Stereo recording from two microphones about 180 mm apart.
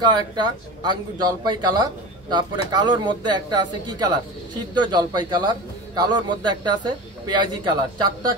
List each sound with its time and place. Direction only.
0.0 s speech: 25° right (ahead or behind)